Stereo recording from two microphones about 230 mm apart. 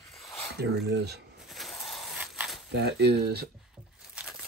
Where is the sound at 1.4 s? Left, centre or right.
Centre.